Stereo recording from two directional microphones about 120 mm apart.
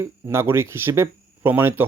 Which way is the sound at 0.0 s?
20° right (ahead or behind).